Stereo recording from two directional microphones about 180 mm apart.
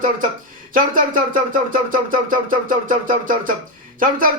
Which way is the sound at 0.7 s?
50° right (ahead or behind).